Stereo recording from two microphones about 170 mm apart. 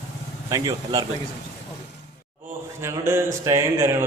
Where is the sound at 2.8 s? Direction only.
15° right (ahead or behind).